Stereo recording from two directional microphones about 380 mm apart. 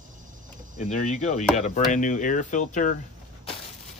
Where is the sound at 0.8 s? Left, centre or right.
Centre.